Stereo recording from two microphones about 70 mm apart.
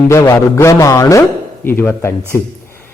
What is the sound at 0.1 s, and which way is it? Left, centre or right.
A man's voice, left.